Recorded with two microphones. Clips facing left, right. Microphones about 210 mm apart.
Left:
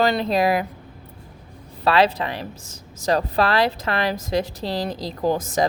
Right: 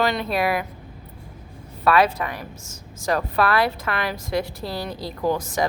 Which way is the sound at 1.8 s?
30° left (ahead or behind).